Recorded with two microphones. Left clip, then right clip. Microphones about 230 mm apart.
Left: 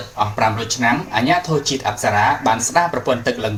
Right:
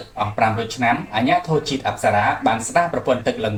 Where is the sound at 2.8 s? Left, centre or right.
Left.